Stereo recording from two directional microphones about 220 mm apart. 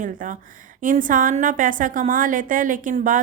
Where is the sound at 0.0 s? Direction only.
35° right (ahead or behind).